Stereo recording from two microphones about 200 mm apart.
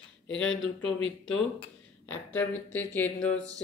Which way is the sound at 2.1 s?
10° left (ahead or behind).